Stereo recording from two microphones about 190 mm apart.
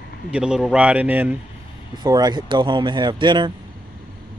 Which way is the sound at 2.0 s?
20° right (ahead or behind).